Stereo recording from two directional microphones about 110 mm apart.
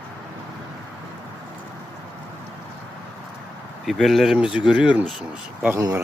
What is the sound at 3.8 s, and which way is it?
Speech, centre (ahead or behind).